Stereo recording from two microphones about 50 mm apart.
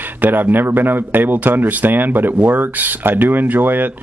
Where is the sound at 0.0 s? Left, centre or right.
Right.